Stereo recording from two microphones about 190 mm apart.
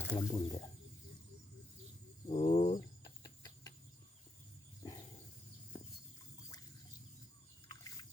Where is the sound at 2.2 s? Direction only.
30° left (ahead or behind).